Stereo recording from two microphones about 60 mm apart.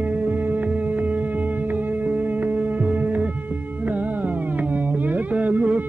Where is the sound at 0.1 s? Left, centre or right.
Right.